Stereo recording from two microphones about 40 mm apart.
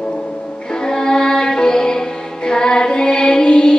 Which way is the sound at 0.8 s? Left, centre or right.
Centre.